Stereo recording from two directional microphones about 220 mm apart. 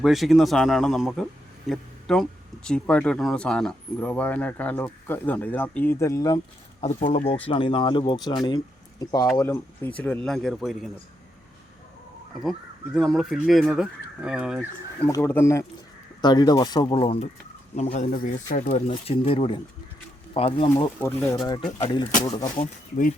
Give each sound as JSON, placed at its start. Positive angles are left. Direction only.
{"t": 0.0, "sound": "a man's voice", "side_deg": 0}
{"t": 6.8, "sound": "speech", "side_deg": 30}
{"t": 12.4, "sound": "speech", "side_deg": 0}
{"t": 15.0, "sound": "speech", "side_deg": 10}
{"t": 18.9, "sound": "speech", "side_deg": 25}
{"t": 21.0, "sound": "speech", "side_deg": 10}
{"t": 21.6, "sound": "speech", "side_deg": 35}
{"t": 22.2, "sound": "speech", "side_deg": 15}
{"t": 22.5, "sound": "speech", "side_deg": 35}